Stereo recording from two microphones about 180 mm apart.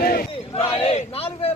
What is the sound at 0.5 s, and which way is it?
Speech, 35° left (ahead or behind).